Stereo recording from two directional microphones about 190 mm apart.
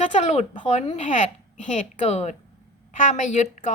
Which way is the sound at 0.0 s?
40° left (ahead or behind).